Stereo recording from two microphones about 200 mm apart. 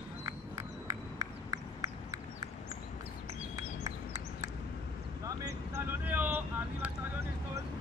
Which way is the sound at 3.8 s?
15° right (ahead or behind).